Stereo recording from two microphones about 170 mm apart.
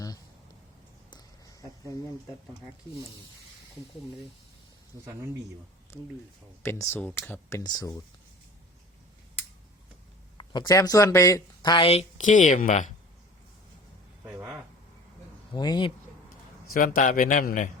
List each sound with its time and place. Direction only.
1.1 s a sound: 20° left (ahead or behind)
5.0 s speech: 15° right (ahead or behind)
5.9 s speech: 15° left (ahead or behind)
10.3 s speech: 25° left (ahead or behind); by 12.9 s 50° left (ahead or behind)
14.3 s a sound: 5° right (ahead or behind)
15.5 s speech: 25° left (ahead or behind)
16.7 s a man's voice: 55° left (ahead or behind)